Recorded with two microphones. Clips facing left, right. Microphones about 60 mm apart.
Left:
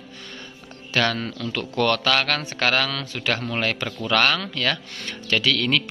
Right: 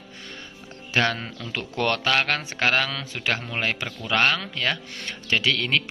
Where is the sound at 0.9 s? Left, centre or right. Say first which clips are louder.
Left 1 dB; centre.